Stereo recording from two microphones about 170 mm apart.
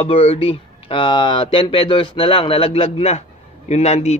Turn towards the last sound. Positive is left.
turn(degrees=40)  # may be behind; listen again after turning